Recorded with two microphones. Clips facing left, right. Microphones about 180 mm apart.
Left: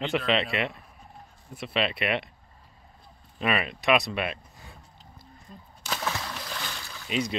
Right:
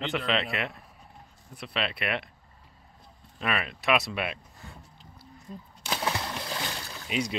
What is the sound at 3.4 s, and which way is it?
Speech, 5° left (ahead or behind).